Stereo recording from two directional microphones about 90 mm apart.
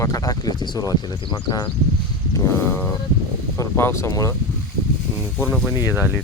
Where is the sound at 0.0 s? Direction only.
45° left (ahead or behind).